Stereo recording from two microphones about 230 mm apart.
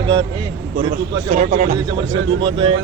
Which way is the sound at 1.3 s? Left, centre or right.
Right.